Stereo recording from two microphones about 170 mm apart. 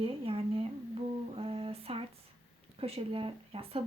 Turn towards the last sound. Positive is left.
turn(degrees=-35)  # may be behind; listen again after turning